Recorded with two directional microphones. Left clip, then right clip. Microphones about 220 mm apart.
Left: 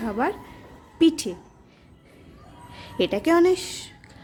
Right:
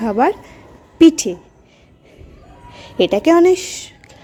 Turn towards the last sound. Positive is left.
turn(degrees=-15)  # may be behind; listen again after turning